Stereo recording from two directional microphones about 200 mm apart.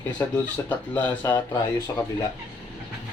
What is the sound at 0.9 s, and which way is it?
Speech, 10° left (ahead or behind).